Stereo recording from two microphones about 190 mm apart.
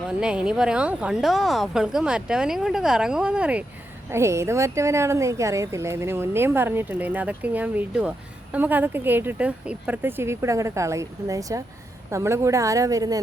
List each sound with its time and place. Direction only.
0.2 s a woman's voice: 5° right (ahead or behind)